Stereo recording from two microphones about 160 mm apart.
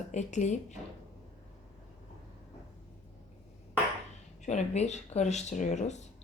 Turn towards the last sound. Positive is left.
turn(degrees=50)  # may be behind; listen again after turning